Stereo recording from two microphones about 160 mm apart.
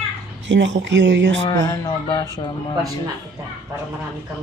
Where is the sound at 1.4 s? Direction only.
25° left (ahead or behind).